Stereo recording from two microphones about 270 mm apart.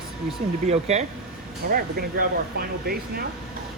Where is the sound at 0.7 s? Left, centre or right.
Right.